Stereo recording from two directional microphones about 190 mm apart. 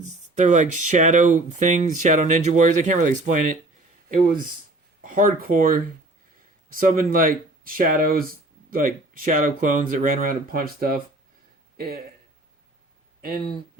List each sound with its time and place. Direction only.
0.0 s speech: 40° right (ahead or behind)
5.0 s speech: 45° right (ahead or behind)